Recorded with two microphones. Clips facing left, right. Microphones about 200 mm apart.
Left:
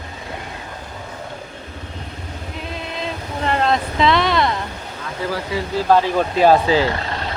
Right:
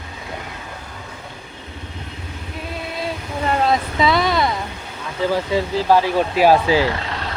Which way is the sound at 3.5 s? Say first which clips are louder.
Even; 5° right (ahead or behind).